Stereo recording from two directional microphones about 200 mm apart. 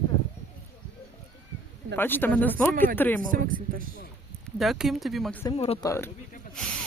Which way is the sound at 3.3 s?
45° right (ahead or behind).